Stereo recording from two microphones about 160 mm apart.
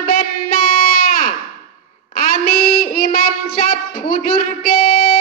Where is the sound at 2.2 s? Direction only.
65° left (ahead or behind).